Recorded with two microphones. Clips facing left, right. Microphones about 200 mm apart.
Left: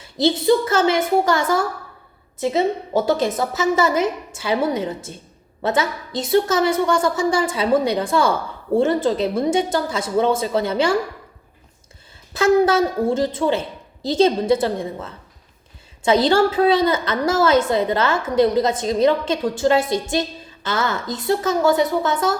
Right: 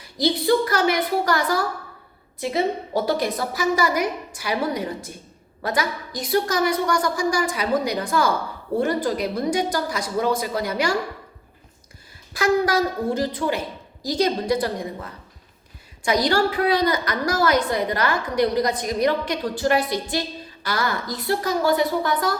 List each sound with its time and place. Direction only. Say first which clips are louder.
0.0 s a woman's voice: left 4 dB; 25° left (ahead or behind)
12.3 s a woman's voice: left 5 dB; 25° left (ahead or behind)